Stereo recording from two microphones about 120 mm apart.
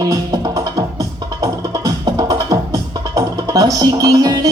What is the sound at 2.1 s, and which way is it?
Music, 30° right (ahead or behind).